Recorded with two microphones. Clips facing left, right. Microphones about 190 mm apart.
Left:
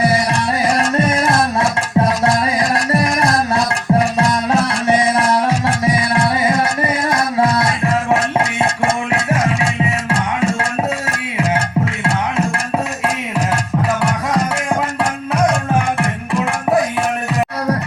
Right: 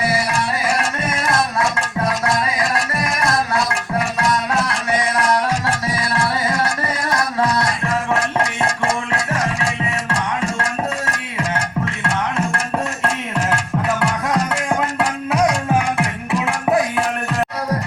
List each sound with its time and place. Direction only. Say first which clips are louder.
0.7 s music: left 6 dB; 30° left (ahead or behind)
5.6 s music: left 5 dB; 20° left (ahead or behind)
9.1 s music: left 4 dB; 20° left (ahead or behind)
14.9 s music: left 1 dB; centre (ahead or behind)